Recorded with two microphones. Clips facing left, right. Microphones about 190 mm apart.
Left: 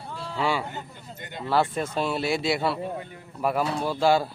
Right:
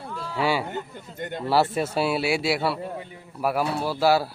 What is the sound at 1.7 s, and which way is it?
Speech, 10° right (ahead or behind).